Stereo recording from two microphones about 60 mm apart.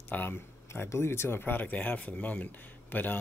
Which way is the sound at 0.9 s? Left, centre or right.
Left.